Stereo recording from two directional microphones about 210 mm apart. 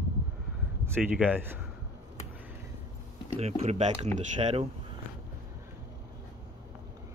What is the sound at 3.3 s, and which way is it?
Speech, 30° right (ahead or behind).